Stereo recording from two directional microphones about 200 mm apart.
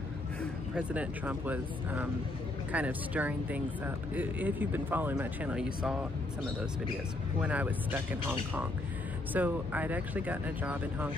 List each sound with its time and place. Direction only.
0.4 s speech: 5° right (ahead or behind)
7.3 s speech: 5° right (ahead or behind)